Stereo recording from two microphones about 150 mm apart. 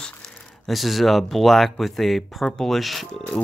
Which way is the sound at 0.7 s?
Centre (ahead or behind).